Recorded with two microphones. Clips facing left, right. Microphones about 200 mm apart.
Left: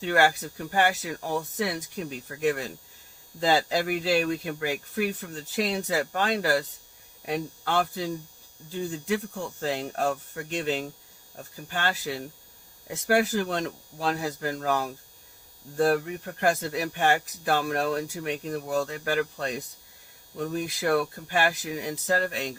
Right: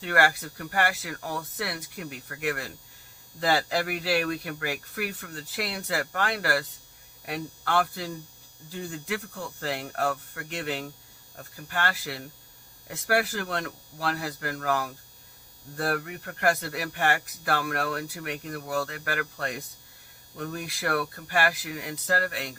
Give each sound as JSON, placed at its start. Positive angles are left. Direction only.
{"t": 0.0, "sound": "speech", "side_deg": 20}